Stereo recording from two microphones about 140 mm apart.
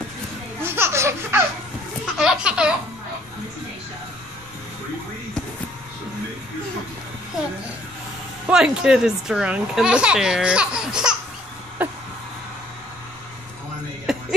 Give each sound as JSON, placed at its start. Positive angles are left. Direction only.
{"t": 0.6, "sound": "baby laughter", "side_deg": -15}
{"t": 2.1, "sound": "speech", "side_deg": -5}
{"t": 8.5, "sound": "speech", "side_deg": -5}
{"t": 14.1, "sound": "a sound", "side_deg": 0}